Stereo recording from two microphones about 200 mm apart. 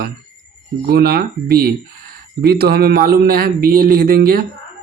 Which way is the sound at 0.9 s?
50° right (ahead or behind).